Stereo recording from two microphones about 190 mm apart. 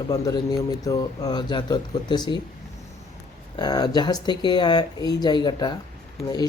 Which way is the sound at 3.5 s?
20° left (ahead or behind).